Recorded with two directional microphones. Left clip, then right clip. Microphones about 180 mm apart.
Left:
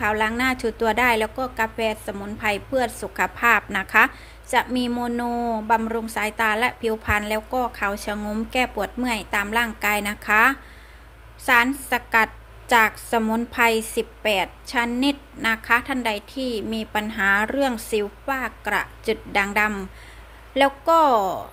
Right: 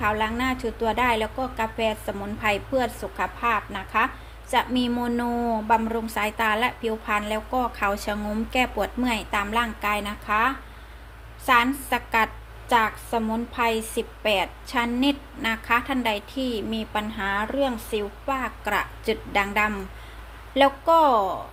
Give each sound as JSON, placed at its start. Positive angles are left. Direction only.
{"t": 0.0, "sound": "a woman's voice", "side_deg": 30}
{"t": 4.5, "sound": "a woman's voice", "side_deg": 20}
{"t": 11.4, "sound": "a woman's voice", "side_deg": 25}